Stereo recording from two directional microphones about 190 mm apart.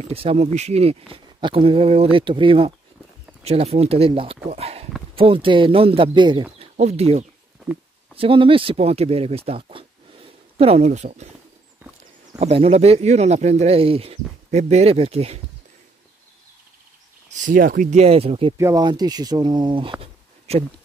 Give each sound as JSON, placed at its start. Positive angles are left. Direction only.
{"t": 0.0, "sound": "speech", "side_deg": -30}
{"t": 4.5, "sound": "a sound", "side_deg": -30}
{"t": 5.1, "sound": "speech", "side_deg": -30}
{"t": 11.8, "sound": "horse", "side_deg": -10}
{"t": 12.4, "sound": "speech", "side_deg": -30}
{"t": 17.4, "sound": "speech", "side_deg": -45}
{"t": 18.6, "sound": "speech", "side_deg": -20}